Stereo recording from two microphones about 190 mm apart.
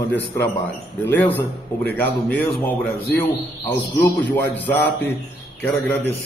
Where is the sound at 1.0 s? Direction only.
10° left (ahead or behind).